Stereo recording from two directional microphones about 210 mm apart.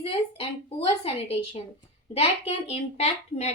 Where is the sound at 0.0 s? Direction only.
25° left (ahead or behind).